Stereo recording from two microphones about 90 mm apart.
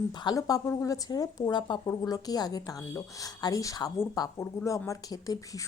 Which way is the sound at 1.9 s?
45° left (ahead or behind).